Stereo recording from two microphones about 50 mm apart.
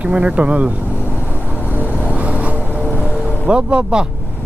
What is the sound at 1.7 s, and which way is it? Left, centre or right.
Vehicle, right.